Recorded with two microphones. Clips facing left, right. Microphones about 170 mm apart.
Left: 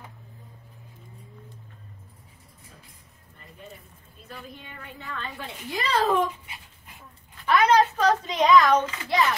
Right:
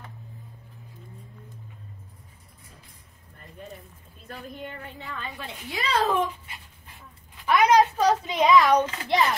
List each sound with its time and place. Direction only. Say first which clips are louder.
5.4 s speech: left 2 dB; centre (ahead or behind)
7.4 s a sound: right 1 dB; 15° right (ahead or behind)
8.5 s a child's voice: left 1 dB; 20° right (ahead or behind)